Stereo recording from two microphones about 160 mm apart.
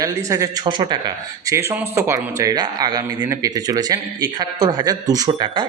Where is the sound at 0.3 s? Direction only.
20° right (ahead or behind).